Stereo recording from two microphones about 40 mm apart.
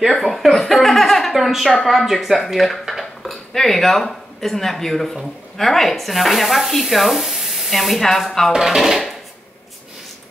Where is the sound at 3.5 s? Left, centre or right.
Centre.